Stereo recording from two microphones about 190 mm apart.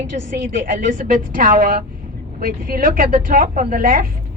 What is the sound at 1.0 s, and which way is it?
Speech, 45° right (ahead or behind).